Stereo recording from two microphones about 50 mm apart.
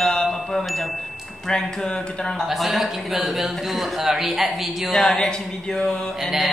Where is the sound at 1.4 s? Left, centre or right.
Centre.